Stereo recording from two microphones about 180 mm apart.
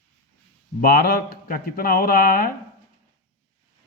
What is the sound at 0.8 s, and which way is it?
Speech, 60° left (ahead or behind).